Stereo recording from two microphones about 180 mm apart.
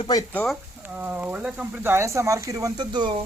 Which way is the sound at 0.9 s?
10° right (ahead or behind).